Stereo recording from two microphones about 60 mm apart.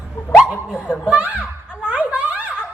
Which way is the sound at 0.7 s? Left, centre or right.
Left.